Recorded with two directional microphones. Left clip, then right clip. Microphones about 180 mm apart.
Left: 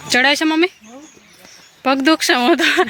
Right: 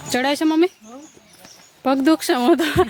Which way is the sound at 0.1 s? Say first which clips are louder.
Left 5 dB; 15° right (ahead or behind).